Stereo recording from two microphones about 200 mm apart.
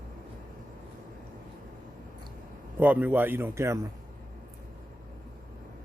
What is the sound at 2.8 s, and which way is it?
Speech, 10° right (ahead or behind).